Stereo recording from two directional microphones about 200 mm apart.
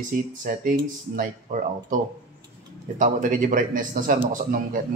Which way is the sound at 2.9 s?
40° right (ahead or behind).